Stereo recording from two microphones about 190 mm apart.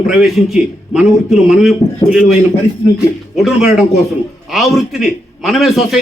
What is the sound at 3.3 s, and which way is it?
A man's voice, centre (ahead or behind).